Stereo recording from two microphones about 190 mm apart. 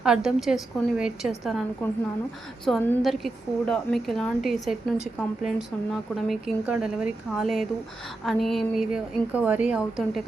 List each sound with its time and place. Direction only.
0.0 s speech: 5° right (ahead or behind)
1.8 s a woman's voice: 10° left (ahead or behind)